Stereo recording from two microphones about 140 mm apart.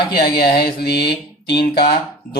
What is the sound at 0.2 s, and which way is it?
Speech, 90° left.